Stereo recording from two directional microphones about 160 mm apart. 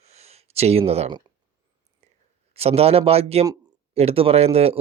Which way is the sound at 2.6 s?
40° right (ahead or behind).